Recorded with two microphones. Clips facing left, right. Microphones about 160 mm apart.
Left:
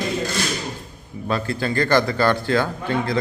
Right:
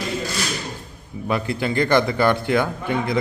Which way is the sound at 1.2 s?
20° right (ahead or behind).